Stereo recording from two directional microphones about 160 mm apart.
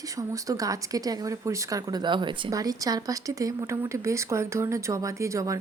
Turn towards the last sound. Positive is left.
turn(degrees=-20)  # may be behind; listen again after turning